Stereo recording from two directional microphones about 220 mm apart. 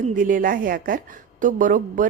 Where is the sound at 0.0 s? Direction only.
35° right (ahead or behind).